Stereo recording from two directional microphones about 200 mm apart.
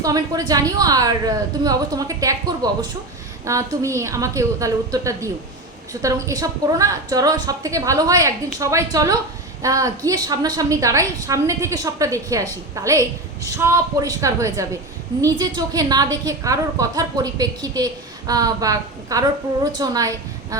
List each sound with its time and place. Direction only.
0.0 s a woman's voice: 20° right (ahead or behind)